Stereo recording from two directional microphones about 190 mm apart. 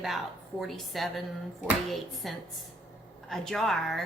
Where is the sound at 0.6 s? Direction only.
Centre (ahead or behind).